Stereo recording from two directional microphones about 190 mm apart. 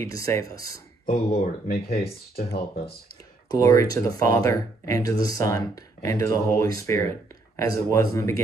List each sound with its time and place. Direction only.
0.0 s speech: 15° left (ahead or behind)
1.0 s speech: 35° left (ahead or behind)
1.4 s speech: 55° left (ahead or behind)
3.4 s speech: 15° left (ahead or behind)